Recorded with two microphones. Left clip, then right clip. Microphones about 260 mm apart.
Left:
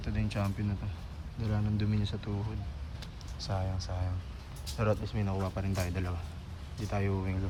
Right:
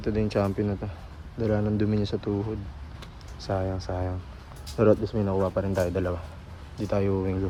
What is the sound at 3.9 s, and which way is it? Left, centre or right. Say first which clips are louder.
Speech: right 11 dB; right.